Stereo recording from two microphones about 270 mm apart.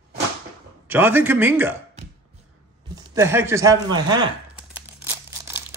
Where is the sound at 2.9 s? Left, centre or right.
Centre.